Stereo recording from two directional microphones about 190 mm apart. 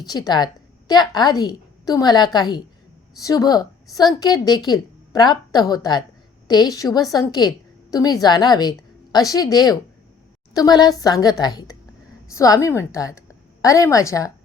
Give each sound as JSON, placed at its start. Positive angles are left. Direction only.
{"t": 0.0, "sound": "a woman's voice", "side_deg": 20}